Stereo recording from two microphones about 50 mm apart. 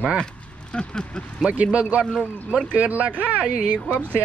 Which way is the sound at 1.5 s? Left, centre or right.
Right.